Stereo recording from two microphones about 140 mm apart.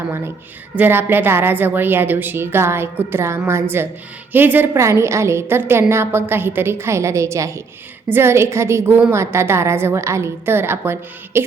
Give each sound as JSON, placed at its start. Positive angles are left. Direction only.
{"t": 0.8, "sound": "a woman's voice", "side_deg": -15}